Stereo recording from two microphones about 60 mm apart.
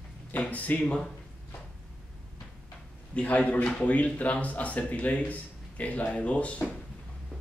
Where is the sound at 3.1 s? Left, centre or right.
Left.